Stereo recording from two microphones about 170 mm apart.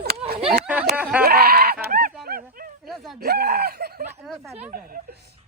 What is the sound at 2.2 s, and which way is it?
Dog, 60° right (ahead or behind).